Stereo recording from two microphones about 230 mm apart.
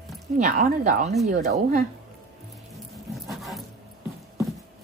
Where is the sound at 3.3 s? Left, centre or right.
Centre.